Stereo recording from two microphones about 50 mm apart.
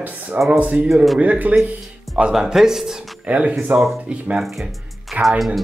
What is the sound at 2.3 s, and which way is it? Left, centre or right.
Speech, centre.